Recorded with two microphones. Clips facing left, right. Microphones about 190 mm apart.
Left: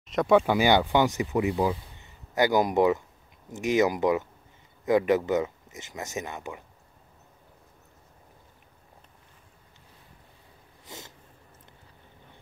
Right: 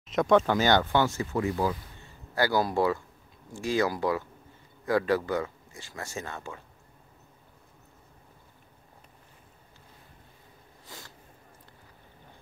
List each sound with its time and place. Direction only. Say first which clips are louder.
0.1 s speech: left 1 dB; centre (ahead or behind)
0.4 s speech: left 2 dB; 15° left (ahead or behind)
10.9 s sniff: left 4 dB; 20° left (ahead or behind)